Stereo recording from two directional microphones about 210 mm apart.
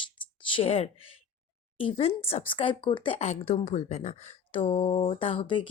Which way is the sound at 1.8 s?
30° left (ahead or behind).